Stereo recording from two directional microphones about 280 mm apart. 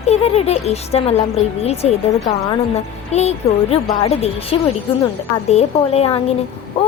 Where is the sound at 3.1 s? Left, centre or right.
Left.